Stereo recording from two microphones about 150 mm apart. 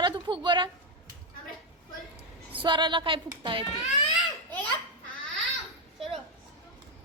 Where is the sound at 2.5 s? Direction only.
35° right (ahead or behind).